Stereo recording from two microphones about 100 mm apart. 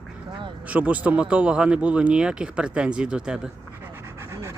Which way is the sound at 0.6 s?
15° right (ahead or behind).